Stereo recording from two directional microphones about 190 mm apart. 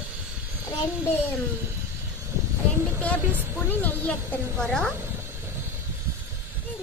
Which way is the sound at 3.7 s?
10° left (ahead or behind).